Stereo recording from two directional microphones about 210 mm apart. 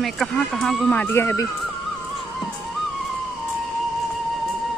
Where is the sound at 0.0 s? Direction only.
Centre (ahead or behind).